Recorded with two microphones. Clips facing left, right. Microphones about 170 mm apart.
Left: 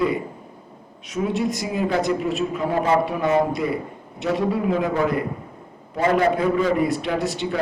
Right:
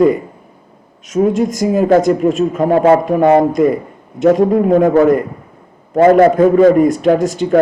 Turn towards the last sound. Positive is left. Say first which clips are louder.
# right 12 dB
turn(degrees=-45)  # may be behind; listen again after turning